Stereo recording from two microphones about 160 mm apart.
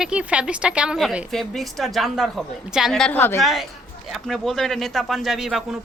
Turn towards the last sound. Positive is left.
turn(degrees=0)  # may be behind; listen again after turning